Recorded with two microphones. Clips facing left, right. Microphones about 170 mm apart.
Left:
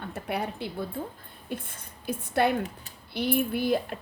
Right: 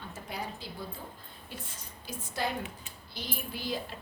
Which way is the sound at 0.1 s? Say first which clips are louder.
Left 8 dB; 65° left (ahead or behind).